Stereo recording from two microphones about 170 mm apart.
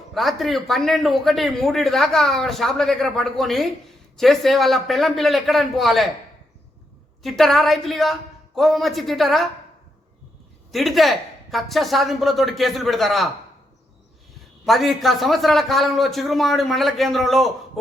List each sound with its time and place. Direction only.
0.1 s a man's voice: centre (ahead or behind)
7.2 s a man's voice: centre (ahead or behind)
10.7 s a man's voice: centre (ahead or behind)
14.6 s a man's voice: centre (ahead or behind)